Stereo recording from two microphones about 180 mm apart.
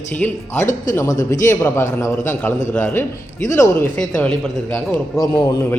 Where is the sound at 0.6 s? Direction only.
45° left (ahead or behind).